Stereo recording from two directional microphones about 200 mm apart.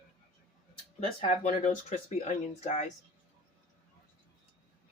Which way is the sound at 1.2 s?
30° left (ahead or behind).